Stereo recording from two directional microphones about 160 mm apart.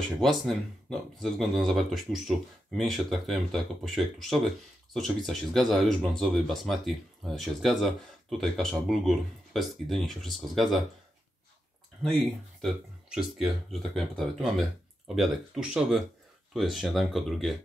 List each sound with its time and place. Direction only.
0.2 s speech: centre (ahead or behind)
12.6 s speech: centre (ahead or behind)